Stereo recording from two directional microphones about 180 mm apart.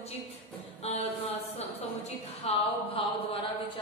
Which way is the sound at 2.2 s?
35° left (ahead or behind).